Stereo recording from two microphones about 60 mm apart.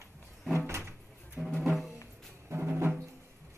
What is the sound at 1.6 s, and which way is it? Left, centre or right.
Music, centre.